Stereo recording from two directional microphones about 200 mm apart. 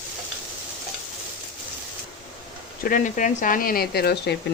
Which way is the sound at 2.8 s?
40° left (ahead or behind).